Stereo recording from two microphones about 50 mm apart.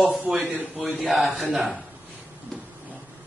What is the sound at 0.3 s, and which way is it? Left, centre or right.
Speech, right.